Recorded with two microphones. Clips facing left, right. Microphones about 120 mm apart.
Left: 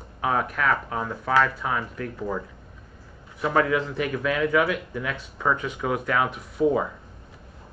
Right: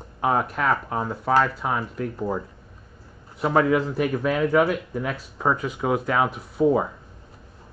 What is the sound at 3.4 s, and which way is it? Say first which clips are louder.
Speech: right 2 dB; 25° right (ahead or behind).